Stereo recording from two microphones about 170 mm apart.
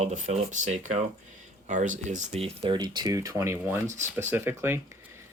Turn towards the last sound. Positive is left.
turn(degrees=-15)  # may be behind; listen again after turning